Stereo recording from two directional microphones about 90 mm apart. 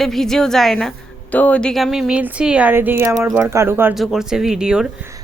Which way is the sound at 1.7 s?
5° right (ahead or behind).